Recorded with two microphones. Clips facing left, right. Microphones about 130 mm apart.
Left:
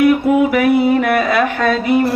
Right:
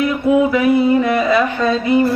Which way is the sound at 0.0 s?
70° left (ahead or behind).